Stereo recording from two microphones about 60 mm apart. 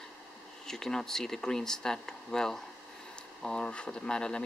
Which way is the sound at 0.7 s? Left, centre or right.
Centre.